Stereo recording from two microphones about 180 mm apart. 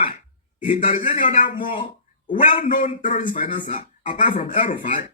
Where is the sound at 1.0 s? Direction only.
45° left (ahead or behind).